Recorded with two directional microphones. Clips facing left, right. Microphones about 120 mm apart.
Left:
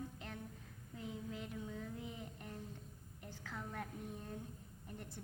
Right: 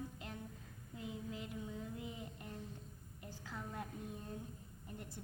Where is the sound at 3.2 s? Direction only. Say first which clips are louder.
Even; 10° right (ahead or behind).